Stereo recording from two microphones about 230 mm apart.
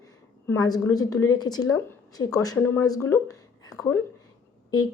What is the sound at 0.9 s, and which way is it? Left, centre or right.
Speech, centre.